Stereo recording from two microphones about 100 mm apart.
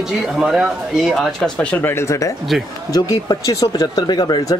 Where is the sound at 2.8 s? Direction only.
40° left (ahead or behind).